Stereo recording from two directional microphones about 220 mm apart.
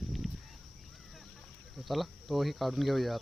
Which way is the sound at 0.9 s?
Centre (ahead or behind).